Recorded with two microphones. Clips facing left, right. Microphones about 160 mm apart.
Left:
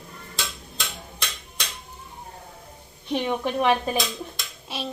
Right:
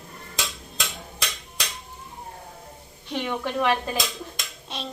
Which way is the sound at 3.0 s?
20° left (ahead or behind).